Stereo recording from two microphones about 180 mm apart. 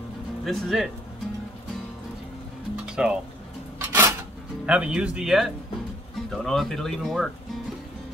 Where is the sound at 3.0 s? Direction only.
5° right (ahead or behind).